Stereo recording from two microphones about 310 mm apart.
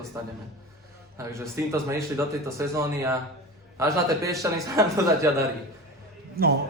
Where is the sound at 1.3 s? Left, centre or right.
Centre.